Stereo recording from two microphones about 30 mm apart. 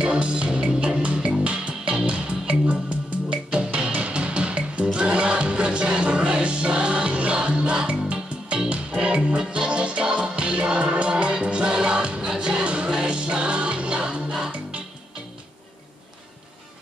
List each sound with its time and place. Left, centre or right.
0.0 s music: right